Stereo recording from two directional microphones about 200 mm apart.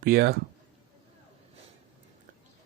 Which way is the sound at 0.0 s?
50° right (ahead or behind).